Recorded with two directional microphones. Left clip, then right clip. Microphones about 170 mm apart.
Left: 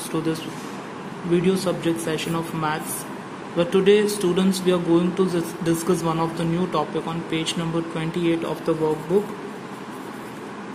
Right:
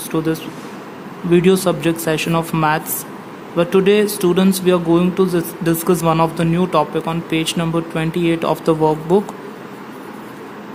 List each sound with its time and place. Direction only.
0.1 s speech: 25° right (ahead or behind)
1.3 s speech: 35° right (ahead or behind)